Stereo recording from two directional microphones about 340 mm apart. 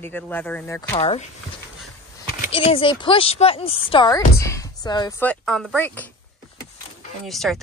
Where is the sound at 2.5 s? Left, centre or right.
Centre.